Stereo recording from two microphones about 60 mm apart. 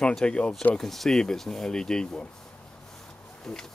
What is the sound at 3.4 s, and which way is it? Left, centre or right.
Speech, centre.